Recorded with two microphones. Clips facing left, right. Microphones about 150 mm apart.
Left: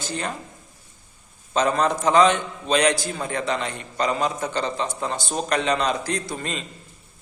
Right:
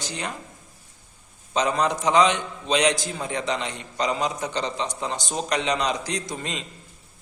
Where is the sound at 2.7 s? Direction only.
15° right (ahead or behind).